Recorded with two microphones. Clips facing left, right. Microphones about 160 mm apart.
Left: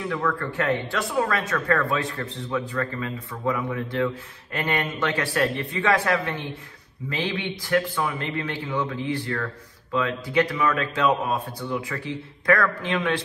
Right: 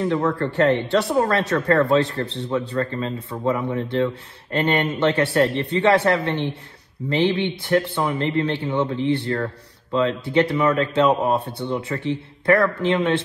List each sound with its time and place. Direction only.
0.1 s speech: 35° right (ahead or behind)
2.2 s a man's voice: 75° right (ahead or behind)
2.7 s a man's voice: 30° right (ahead or behind)